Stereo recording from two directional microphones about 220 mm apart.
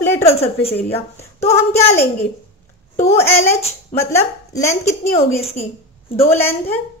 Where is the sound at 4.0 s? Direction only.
15° left (ahead or behind).